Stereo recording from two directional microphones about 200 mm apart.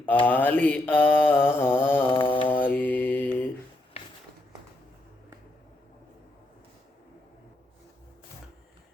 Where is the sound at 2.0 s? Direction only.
25° left (ahead or behind).